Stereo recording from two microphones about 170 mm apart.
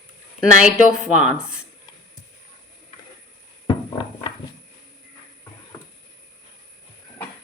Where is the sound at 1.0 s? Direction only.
45° right (ahead or behind).